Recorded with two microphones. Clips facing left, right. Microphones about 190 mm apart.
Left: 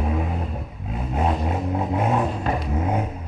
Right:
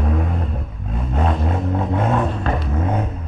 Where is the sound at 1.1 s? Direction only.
5° left (ahead or behind).